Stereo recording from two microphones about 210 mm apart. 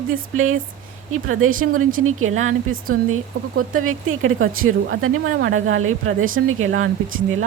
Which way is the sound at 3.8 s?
75° right (ahead or behind).